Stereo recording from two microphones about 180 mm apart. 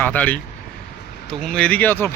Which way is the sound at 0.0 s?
10° left (ahead or behind).